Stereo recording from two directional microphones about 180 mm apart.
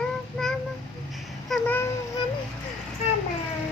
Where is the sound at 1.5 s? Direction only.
10° left (ahead or behind).